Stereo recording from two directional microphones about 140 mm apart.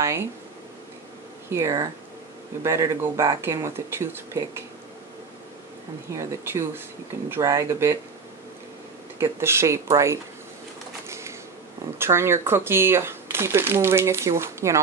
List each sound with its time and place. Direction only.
0.0 s speech: 20° right (ahead or behind)
1.5 s speech: 20° right (ahead or behind)
6.1 s speech: 15° right (ahead or behind)
9.2 s speech: 20° right (ahead or behind)
11.1 s a sound: 20° right (ahead or behind)
12.0 s speech: 20° right (ahead or behind)